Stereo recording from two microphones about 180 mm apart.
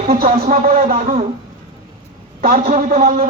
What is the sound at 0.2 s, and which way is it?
A man's voice, 50° right (ahead or behind).